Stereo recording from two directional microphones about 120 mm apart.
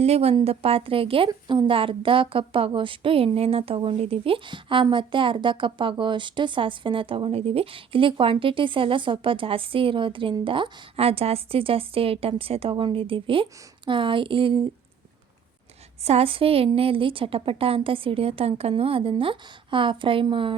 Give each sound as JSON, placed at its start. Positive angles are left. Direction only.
{"t": 0.0, "sound": "a woman's voice", "side_deg": -60}
{"t": 16.0, "sound": "a woman's voice", "side_deg": -55}